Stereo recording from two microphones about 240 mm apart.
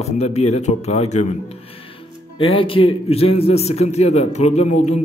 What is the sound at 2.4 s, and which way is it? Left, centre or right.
A man's voice, left.